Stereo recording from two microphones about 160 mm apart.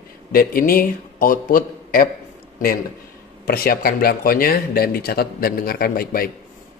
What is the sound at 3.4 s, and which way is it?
A man's voice, 70° left (ahead or behind).